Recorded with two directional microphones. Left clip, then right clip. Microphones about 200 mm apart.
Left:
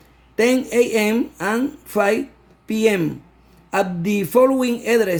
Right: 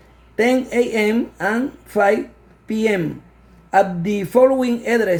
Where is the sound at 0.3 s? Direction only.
55° left (ahead or behind).